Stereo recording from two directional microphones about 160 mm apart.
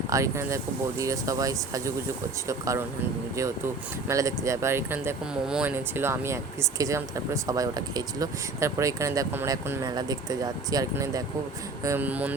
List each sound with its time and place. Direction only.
0.1 s speech: 20° right (ahead or behind)
4.1 s speech: 20° right (ahead or behind)